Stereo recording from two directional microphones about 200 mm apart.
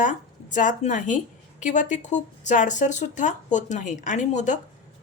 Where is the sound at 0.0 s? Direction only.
40° left (ahead or behind).